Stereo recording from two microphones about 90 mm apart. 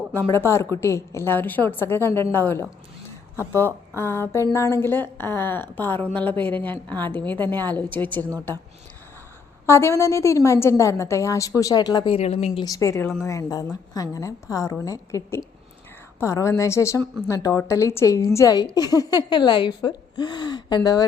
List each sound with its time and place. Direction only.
0.1 s a woman's voice: 25° left (ahead or behind)
9.6 s a woman's voice: 30° left (ahead or behind); by 12.0 s 50° left (ahead or behind)
12.0 s speech: 65° left (ahead or behind)
12.6 s a woman's voice: 40° left (ahead or behind)
18.5 s speech: 50° left (ahead or behind)